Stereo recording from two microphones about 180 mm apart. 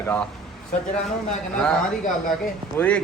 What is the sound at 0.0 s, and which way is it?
Speech, 10° left (ahead or behind).